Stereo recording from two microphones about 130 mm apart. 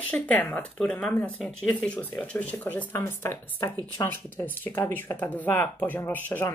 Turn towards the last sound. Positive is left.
turn(degrees=15)  # may be behind; listen again after turning